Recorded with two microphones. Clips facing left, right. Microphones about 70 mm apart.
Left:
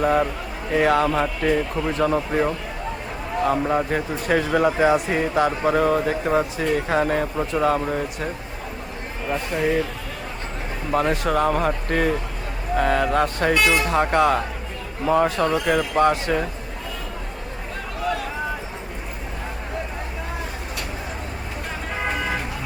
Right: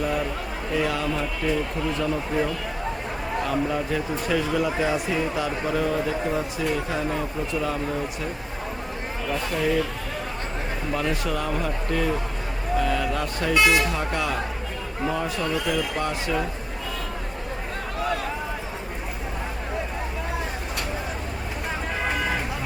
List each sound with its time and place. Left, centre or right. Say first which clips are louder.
0.0 s a man's voice: left 6 dB; left
9.3 s speech: left 2 dB; left
10.9 s speech: left 7 dB; left
22.1 s vehicle: even; centre